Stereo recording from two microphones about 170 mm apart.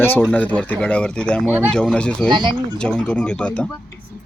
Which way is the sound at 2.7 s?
5° left (ahead or behind).